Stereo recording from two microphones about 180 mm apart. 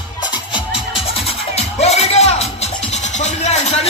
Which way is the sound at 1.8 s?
35° left (ahead or behind).